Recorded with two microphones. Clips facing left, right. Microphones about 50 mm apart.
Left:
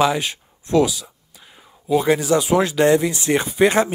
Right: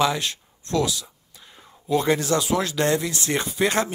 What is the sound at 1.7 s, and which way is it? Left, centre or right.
Speech, centre.